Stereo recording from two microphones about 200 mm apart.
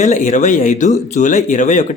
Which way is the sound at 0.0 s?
35° left (ahead or behind).